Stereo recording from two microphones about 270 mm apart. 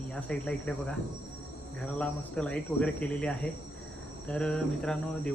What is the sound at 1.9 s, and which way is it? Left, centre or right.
Speech, centre.